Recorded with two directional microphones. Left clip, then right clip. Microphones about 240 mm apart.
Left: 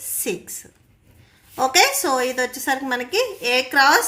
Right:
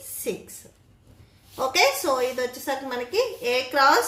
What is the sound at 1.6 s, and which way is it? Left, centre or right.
A woman's voice, left.